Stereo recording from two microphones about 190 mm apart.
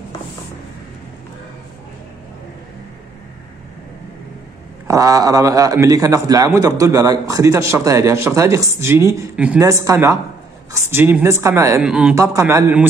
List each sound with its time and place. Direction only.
4.8 s a man's voice: 15° right (ahead or behind)